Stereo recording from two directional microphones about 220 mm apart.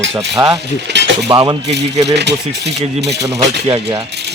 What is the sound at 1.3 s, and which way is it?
Speech, 20° right (ahead or behind).